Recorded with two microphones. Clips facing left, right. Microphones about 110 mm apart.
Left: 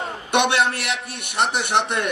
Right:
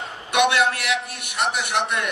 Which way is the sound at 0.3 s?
30° left (ahead or behind).